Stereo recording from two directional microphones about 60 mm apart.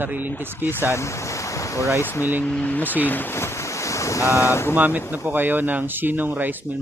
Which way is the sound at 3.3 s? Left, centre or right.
Left.